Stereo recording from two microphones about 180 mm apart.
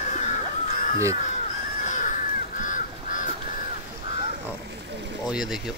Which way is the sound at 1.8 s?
45° left (ahead or behind).